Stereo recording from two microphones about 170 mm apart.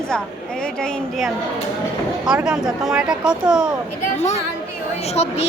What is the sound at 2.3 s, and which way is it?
A woman's voice, 5° right (ahead or behind).